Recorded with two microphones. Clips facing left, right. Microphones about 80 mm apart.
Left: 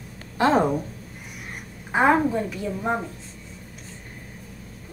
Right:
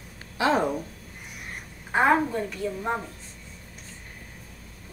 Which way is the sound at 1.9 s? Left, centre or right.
Centre.